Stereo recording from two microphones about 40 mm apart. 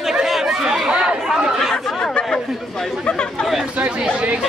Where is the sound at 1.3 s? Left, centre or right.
Centre.